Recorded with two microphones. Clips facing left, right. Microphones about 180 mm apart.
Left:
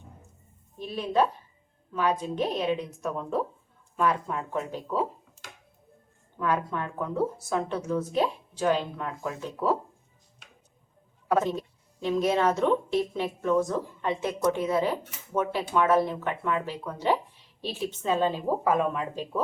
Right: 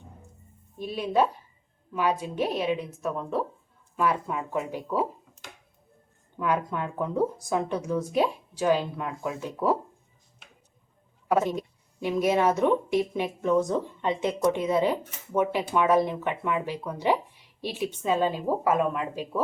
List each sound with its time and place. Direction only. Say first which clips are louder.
0.8 s a woman's voice: right 1 dB; 10° right (ahead or behind)
6.4 s a woman's voice: right 1 dB; 15° right (ahead or behind)
11.3 s a woman's voice: right 1 dB; 10° right (ahead or behind)